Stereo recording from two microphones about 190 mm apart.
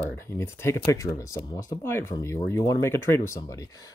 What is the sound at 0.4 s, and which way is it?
Speech, 15° left (ahead or behind).